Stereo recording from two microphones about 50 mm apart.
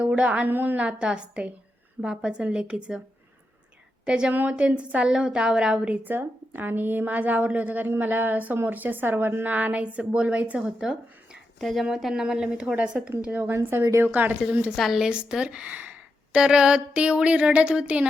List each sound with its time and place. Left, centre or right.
0.0 s a woman's voice: right
0.4 s a woman's voice: right
0.8 s a woman's voice: right
4.0 s speech: centre
4.3 s a woman's voice: right
4.5 s a woman's voice: right
5.9 s a woman's voice: right; by 10.9 s centre
11.6 s a woman's voice: centre
12.7 s a woman's voice: right
13.5 s a woman's voice: right
14.0 s a woman's voice: right
14.8 s a woman's voice: centre
15.1 s speech: centre
16.4 s a woman's voice: centre